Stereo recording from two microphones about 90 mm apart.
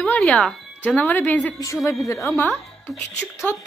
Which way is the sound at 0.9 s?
20° left (ahead or behind).